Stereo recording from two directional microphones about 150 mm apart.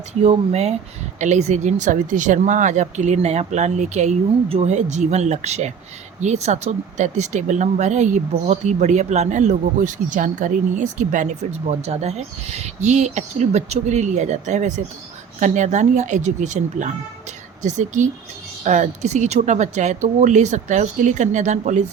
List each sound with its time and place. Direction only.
0.1 s speech: 45° right (ahead or behind)